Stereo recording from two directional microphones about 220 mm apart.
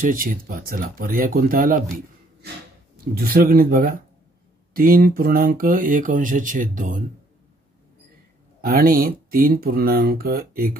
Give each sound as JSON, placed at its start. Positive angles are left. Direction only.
{"t": 0.0, "sound": "speech", "side_deg": -40}
{"t": 3.2, "sound": "speech", "side_deg": -40}
{"t": 8.5, "sound": "speech", "side_deg": -40}